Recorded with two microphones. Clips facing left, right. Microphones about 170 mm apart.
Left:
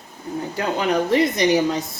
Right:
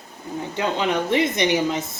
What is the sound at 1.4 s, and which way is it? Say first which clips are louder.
Speech: left 3 dB; 35° left (ahead or behind).